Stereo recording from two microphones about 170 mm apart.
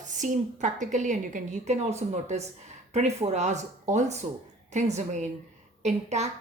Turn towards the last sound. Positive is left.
turn(degrees=-40)  # may be behind; listen again after turning